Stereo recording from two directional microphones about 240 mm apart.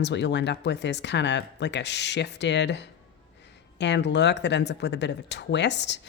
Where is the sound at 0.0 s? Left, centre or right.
Left.